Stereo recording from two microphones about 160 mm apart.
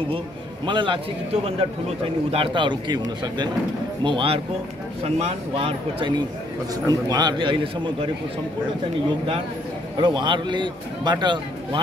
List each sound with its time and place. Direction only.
0.7 s a man's voice: 30° right (ahead or behind)
10.0 s a man's voice: 30° right (ahead or behind)